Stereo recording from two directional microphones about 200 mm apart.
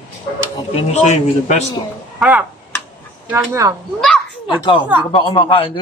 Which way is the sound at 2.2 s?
5° right (ahead or behind).